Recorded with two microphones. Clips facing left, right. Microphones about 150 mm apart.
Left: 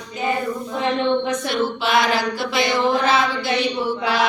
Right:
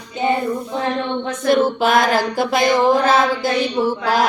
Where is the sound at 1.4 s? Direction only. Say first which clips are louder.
Right 7 dB; 45° right (ahead or behind).